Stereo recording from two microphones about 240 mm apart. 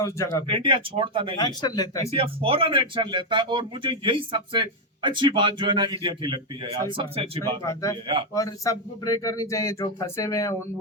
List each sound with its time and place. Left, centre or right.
0.0 s speech: centre
0.4 s speech: right
1.4 s speech: centre
2.0 s speech: right
7.6 s speech: centre